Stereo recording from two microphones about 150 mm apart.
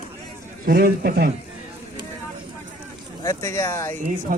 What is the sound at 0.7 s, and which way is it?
Speech, 90° right.